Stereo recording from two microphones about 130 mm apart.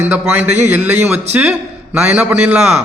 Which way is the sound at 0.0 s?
15° right (ahead or behind).